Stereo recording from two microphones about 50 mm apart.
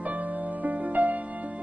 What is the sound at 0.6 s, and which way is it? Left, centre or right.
Music, right.